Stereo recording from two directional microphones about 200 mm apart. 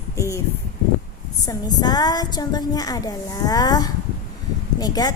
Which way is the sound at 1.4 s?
20° left (ahead or behind).